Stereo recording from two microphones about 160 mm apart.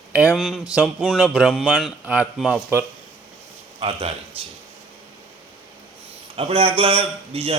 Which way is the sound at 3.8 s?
35° right (ahead or behind).